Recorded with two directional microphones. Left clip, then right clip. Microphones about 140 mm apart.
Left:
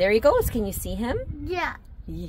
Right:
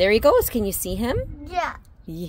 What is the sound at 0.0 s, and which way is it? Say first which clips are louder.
Speech: right 3 dB; 50° right (ahead or behind).